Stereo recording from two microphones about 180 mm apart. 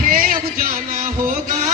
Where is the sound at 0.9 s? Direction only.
40° right (ahead or behind).